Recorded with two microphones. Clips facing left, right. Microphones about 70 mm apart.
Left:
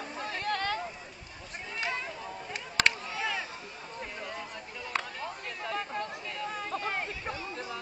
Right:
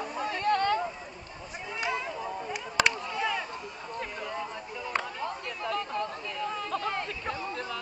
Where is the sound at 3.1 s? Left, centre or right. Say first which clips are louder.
Right 3 dB; centre.